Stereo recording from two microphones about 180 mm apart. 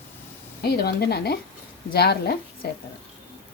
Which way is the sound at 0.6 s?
65° left (ahead or behind).